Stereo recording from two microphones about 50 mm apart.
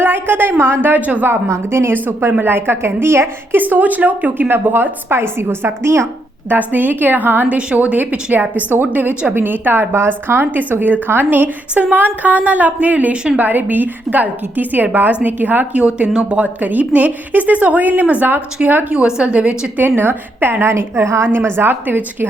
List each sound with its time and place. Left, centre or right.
0.0 s a woman's voice: right
1.3 s a woman's voice: right
1.9 s a woman's voice: right
3.6 s a woman's voice: right
6.5 s a woman's voice: right
7.4 s a woman's voice: right
18.9 s a woman's voice: centre
20.0 s a woman's voice: right
21.2 s a woman's voice: right